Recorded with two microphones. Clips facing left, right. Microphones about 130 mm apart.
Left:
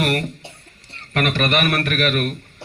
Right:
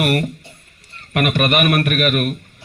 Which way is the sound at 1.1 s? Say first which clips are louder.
Right 2 dB; 15° right (ahead or behind).